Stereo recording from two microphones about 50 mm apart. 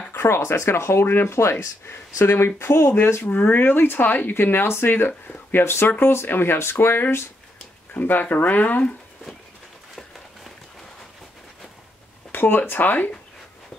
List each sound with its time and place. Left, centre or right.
0.1 s a sound: left
0.5 s speech: left
1.0 s speech: left
1.3 s speech: left
2.2 s speech: left
3.3 s speech: left
3.5 s speech: left
7.9 s speech: left
12.3 s speech: left